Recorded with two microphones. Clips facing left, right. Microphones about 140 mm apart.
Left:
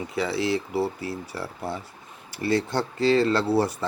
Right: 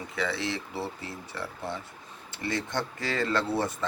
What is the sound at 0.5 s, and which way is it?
Speech, 25° left (ahead or behind).